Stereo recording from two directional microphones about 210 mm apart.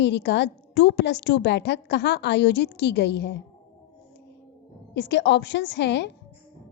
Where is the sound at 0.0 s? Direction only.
55° left (ahead or behind).